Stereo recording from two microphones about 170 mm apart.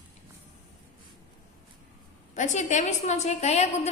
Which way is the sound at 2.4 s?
45° left (ahead or behind).